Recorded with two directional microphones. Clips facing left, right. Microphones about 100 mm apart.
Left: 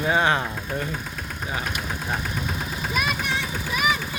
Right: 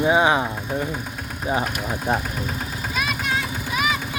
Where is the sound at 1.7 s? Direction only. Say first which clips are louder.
Right 4 dB; 10° right (ahead or behind).